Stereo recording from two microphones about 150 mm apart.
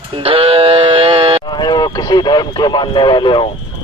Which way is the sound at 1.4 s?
30° left (ahead or behind).